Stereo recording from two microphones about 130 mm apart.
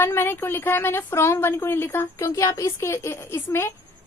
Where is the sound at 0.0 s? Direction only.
20° left (ahead or behind).